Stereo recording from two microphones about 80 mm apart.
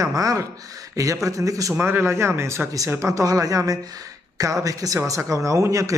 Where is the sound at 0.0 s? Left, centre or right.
Right.